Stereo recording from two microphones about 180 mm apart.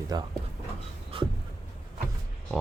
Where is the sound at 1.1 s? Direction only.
30° right (ahead or behind).